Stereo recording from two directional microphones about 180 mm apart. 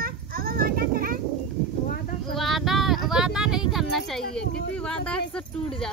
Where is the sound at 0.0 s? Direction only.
55° right (ahead or behind).